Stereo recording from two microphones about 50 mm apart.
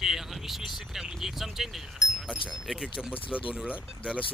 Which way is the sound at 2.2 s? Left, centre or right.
Centre.